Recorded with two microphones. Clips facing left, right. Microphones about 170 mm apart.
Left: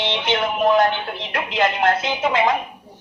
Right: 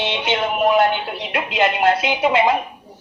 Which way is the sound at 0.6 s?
15° right (ahead or behind).